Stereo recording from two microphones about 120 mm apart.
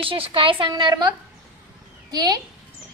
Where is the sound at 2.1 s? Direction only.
35° right (ahead or behind).